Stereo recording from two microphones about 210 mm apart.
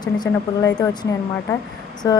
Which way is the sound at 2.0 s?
15° left (ahead or behind).